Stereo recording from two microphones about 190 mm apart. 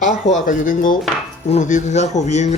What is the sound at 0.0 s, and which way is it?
Speech, 40° left (ahead or behind).